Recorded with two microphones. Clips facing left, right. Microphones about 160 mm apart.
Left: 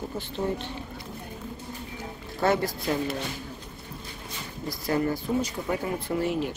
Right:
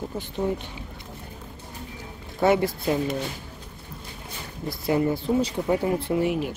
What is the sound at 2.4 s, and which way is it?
Speech, 20° right (ahead or behind).